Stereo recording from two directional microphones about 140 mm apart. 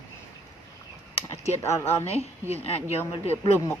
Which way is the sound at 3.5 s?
15° left (ahead or behind).